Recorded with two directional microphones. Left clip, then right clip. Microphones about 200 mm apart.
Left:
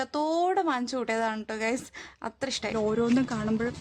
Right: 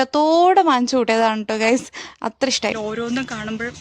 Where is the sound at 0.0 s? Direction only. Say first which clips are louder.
Right 12 dB; 40° right (ahead or behind).